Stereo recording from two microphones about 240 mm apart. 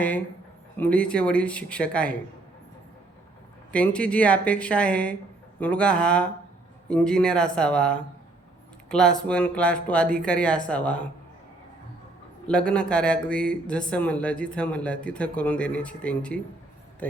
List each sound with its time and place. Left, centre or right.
0.8 s speech: centre
3.7 s speech: centre
12.5 s speech: centre